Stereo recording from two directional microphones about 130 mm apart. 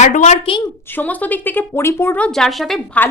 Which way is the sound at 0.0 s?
65° left (ahead or behind).